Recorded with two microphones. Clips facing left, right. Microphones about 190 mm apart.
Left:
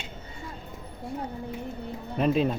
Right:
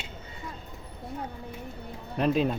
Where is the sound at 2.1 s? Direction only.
Centre (ahead or behind).